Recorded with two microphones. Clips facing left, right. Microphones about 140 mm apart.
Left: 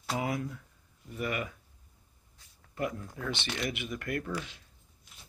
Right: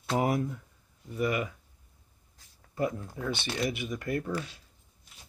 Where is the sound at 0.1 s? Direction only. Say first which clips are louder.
Right 7 dB; 40° right (ahead or behind).